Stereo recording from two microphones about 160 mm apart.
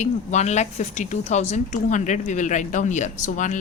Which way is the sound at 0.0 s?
45° left (ahead or behind).